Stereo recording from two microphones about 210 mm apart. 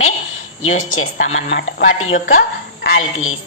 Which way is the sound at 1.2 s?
30° left (ahead or behind).